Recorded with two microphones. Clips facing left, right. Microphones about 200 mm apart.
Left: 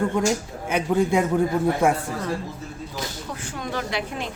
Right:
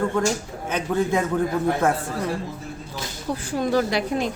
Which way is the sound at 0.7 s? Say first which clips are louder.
Left 2 dB; 10° left (ahead or behind).